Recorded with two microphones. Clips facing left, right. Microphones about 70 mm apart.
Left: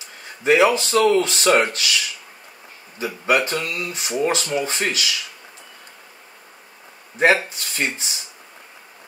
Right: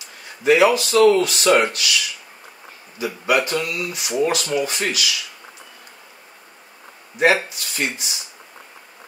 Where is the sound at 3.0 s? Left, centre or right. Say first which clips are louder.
Even; left.